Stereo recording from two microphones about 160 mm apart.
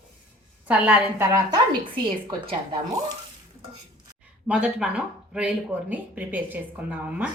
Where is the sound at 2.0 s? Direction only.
30° right (ahead or behind).